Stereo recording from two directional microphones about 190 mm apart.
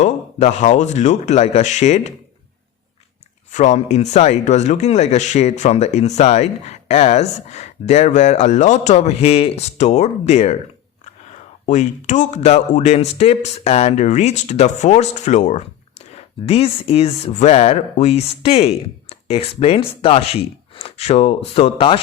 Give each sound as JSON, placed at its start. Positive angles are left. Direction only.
{"t": 0.0, "sound": "speech", "side_deg": 40}
{"t": 3.5, "sound": "speech", "side_deg": 40}